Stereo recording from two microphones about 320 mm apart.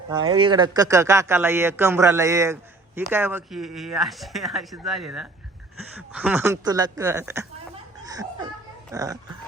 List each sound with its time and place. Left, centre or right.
0.1 s speech: centre
5.7 s speech: right
6.1 s speech: centre